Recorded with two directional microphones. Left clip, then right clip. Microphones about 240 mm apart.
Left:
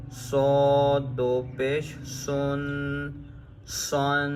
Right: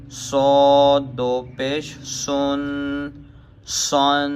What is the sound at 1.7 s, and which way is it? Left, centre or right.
Speech, centre.